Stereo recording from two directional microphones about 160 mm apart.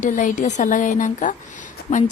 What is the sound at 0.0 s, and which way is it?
Speech, 55° left (ahead or behind).